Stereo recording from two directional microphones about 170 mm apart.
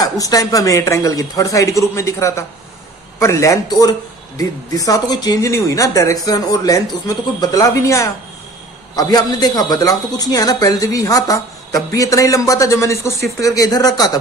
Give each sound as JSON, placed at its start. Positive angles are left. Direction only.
{"t": 0.0, "sound": "a man's voice", "side_deg": 20}